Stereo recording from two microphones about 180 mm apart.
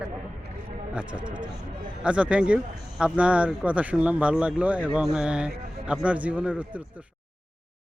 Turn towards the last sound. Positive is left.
turn(degrees=-10)  # may be behind; listen again after turning